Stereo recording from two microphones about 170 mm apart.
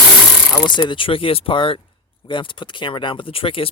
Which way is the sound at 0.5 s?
25° left (ahead or behind).